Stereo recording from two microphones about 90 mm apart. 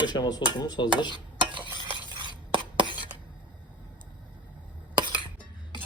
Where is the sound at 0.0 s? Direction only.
50° left (ahead or behind).